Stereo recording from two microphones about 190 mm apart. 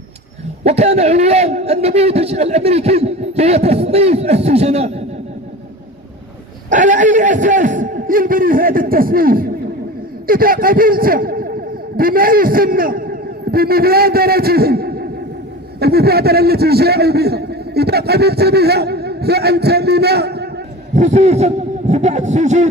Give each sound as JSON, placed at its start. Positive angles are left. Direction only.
{"t": 0.7, "sound": "a man's voice", "side_deg": -35}
{"t": 6.7, "sound": "a man's voice", "side_deg": -40}
{"t": 20.9, "sound": "a man's voice", "side_deg": -35}